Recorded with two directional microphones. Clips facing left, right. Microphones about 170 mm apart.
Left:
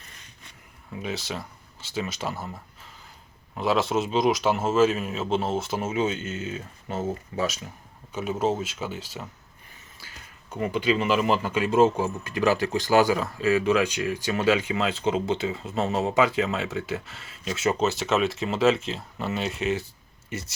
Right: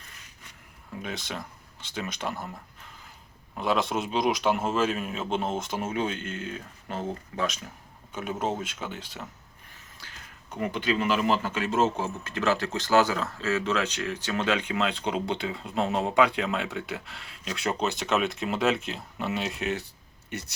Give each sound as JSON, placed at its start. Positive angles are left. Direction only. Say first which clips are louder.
{"t": 1.0, "sound": "speech", "louder": "left 4 dB", "side_deg": 5}
{"t": 3.6, "sound": "speech", "louder": "left 3 dB", "side_deg": 0}
{"t": 10.0, "sound": "a sound", "louder": "even", "side_deg": 5}
{"t": 10.7, "sound": "speech", "louder": "left 3 dB", "side_deg": 10}